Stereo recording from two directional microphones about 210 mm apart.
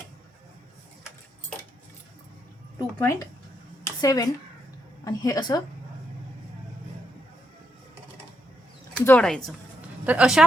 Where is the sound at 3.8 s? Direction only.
15° left (ahead or behind).